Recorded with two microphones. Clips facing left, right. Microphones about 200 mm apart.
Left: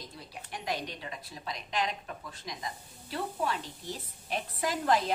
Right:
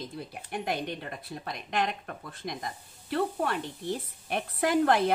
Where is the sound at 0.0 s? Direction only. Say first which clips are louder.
Right 7 dB; 55° right (ahead or behind).